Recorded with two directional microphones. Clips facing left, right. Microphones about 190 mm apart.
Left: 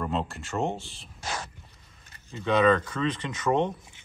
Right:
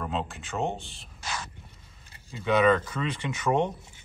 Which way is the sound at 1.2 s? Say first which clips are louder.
Left 2 dB; 45° left (ahead or behind).